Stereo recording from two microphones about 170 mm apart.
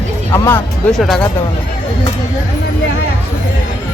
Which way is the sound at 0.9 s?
Centre (ahead or behind).